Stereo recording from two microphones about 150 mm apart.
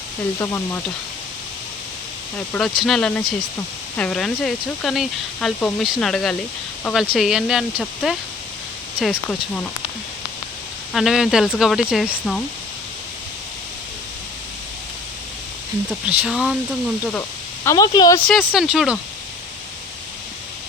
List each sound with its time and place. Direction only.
0.3 s speech: 20° left (ahead or behind)
2.5 s speech: 5° left (ahead or behind)
10.9 s speech: centre (ahead or behind)
16.0 s speech: 5° right (ahead or behind)
17.7 s speech: 25° left (ahead or behind)
18.3 s speech: centre (ahead or behind)